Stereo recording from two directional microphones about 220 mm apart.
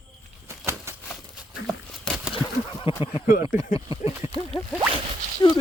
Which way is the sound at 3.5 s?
35° left (ahead or behind).